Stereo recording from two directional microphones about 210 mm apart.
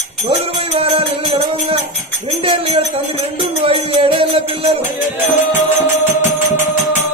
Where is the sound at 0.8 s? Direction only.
25° right (ahead or behind).